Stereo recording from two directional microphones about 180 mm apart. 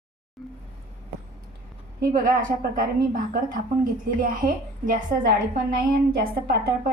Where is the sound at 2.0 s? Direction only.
50° right (ahead or behind).